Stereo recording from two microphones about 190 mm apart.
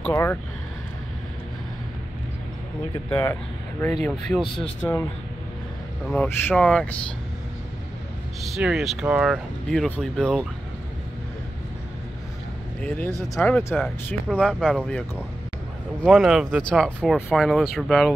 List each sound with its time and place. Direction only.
0.0 s speech: 10° left (ahead or behind)
3.1 s speech: 15° left (ahead or behind)
6.0 s speech: 10° left (ahead or behind)
8.5 s speech: centre (ahead or behind)
12.8 s speech: 10° left (ahead or behind)